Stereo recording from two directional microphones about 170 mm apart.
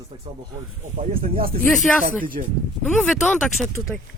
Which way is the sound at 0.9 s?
55° right (ahead or behind).